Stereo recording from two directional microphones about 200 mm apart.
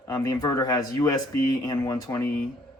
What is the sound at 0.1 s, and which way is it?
A man's voice, 15° left (ahead or behind).